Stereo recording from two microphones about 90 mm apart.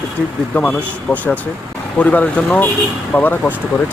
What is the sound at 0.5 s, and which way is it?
Speech, 15° left (ahead or behind).